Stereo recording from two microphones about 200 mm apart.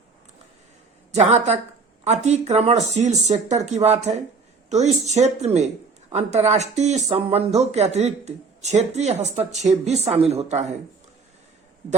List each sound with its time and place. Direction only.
1.2 s speech: 35° right (ahead or behind)